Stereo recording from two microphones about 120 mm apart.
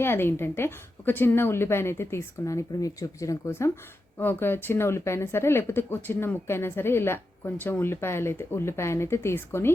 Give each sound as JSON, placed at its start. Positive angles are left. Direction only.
{"t": 0.0, "sound": "speech", "side_deg": 20}